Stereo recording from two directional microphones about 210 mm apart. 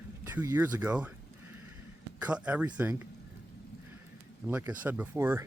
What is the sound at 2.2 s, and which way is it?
Speech, 5° right (ahead or behind).